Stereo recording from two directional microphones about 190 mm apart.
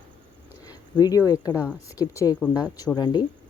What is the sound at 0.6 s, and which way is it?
A woman's voice, 20° left (ahead or behind).